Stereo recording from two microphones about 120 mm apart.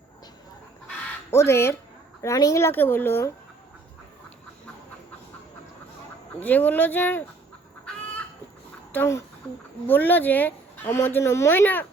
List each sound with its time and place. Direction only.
1.3 s speech: 20° left (ahead or behind)
6.4 s a woman's voice: 15° left (ahead or behind)
8.9 s a woman's voice: 15° left (ahead or behind)